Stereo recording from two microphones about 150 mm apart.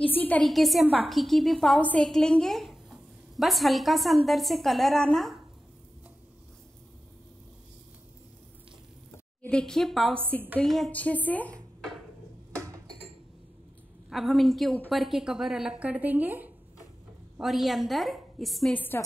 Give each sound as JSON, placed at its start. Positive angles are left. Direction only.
{"t": 0.0, "sound": "a woman's voice", "side_deg": 10}
{"t": 9.1, "sound": "a woman's voice", "side_deg": 10}
{"t": 12.6, "sound": "a sound", "side_deg": -20}
{"t": 14.0, "sound": "speech", "side_deg": 0}
{"t": 18.8, "sound": "a woman's voice", "side_deg": 15}